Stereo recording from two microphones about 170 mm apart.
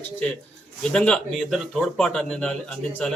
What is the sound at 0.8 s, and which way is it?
Speech, 5° left (ahead or behind).